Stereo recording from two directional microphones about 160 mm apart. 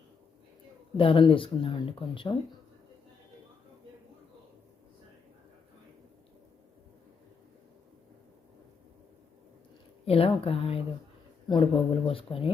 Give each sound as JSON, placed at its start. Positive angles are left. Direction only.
{"t": 0.9, "sound": "speech", "side_deg": 35}
{"t": 10.1, "sound": "speech", "side_deg": 35}